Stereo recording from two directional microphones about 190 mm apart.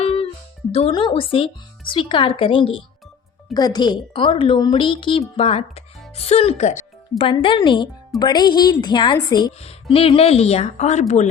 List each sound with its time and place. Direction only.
0.0 s music: 30° left (ahead or behind)
0.7 s speech: 30° left (ahead or behind)